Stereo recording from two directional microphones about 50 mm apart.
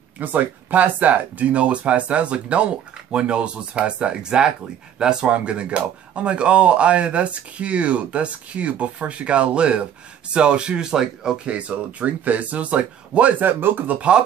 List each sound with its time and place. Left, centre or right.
0.2 s speech: right; by 11.3 s centre
11.4 s speech: right